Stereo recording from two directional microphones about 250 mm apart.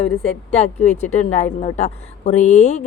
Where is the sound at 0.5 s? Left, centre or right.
Left.